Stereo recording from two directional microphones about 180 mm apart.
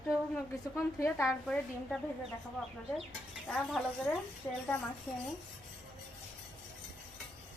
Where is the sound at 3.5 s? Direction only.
5° left (ahead or behind).